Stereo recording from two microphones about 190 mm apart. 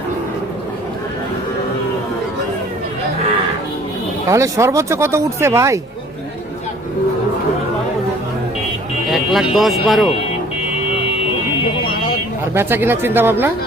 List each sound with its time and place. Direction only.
4.3 s speech: 15° right (ahead or behind)
9.0 s speech: centre (ahead or behind)
12.5 s speech: 10° right (ahead or behind)